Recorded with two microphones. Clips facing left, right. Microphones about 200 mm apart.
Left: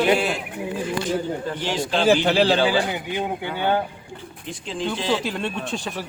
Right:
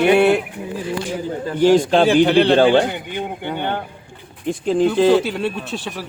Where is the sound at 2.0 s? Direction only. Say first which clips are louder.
Right 4 dB; centre (ahead or behind).